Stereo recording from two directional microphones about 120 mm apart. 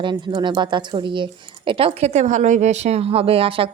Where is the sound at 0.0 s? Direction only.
40° right (ahead or behind).